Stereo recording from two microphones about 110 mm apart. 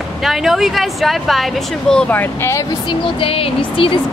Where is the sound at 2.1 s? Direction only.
20° left (ahead or behind).